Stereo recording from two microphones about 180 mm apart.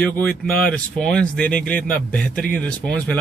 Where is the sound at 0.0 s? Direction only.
5° left (ahead or behind).